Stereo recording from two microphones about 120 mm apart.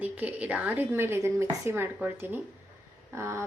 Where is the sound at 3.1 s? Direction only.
25° right (ahead or behind).